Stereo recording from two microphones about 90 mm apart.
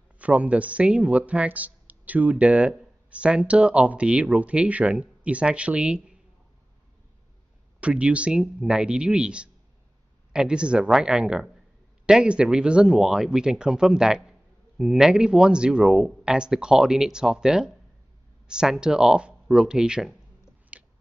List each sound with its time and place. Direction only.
0.2 s speech: 15° right (ahead or behind)
7.8 s speech: 15° right (ahead or behind)
20.7 s chewing: 15° right (ahead or behind)